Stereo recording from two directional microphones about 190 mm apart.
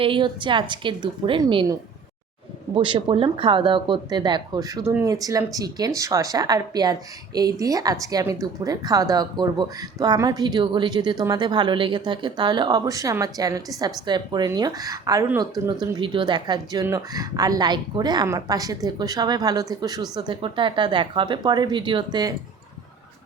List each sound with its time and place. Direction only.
0.0 s a woman's voice: 25° right (ahead or behind)
2.7 s a woman's voice: 25° right (ahead or behind)